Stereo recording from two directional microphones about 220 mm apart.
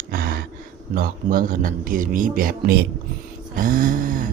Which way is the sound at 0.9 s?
40° right (ahead or behind).